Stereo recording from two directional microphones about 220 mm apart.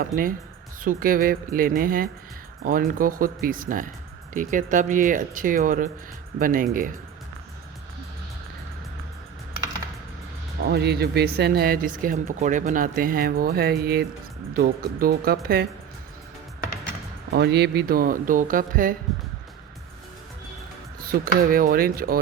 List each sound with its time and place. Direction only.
0.0 s speech: 40° right (ahead or behind)
10.7 s speech: 45° right (ahead or behind)
17.3 s speech: 50° right (ahead or behind)
21.0 s speech: 40° right (ahead or behind)